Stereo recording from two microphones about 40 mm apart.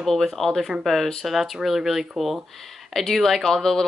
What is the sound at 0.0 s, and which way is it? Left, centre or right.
Speech, centre.